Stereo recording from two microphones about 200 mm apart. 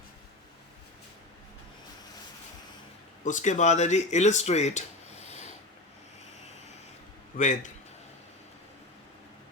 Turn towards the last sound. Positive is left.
turn(degrees=40)  # may be behind; listen again after turning